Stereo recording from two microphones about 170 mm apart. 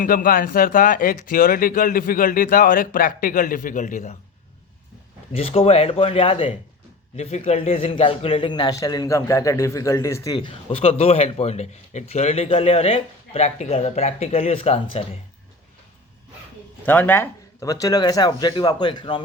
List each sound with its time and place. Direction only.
0.0 s speech: 55° left (ahead or behind)
5.3 s a man's voice: 35° left (ahead or behind)
16.8 s speech: 10° left (ahead or behind); by 19.2 s 30° left (ahead or behind)